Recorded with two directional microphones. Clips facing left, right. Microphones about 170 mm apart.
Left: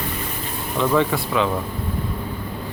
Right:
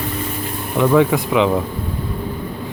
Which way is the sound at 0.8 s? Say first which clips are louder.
Right 5 dB; 10° right (ahead or behind).